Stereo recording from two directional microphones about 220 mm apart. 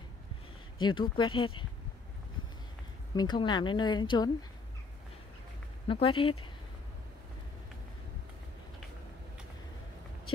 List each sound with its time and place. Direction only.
0.7 s speech: 20° left (ahead or behind)
3.2 s speech: 20° left (ahead or behind)
5.9 s speech: 25° left (ahead or behind)